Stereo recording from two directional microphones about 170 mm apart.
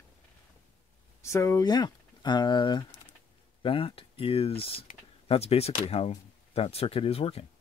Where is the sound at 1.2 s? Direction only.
15° left (ahead or behind); by 7.4 s 35° left (ahead or behind).